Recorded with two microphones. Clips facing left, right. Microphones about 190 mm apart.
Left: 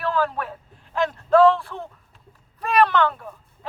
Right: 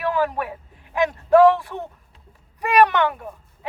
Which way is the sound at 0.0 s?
15° right (ahead or behind).